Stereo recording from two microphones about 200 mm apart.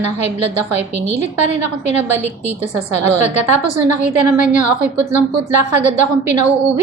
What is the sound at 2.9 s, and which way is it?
A woman's voice, 35° left (ahead or behind).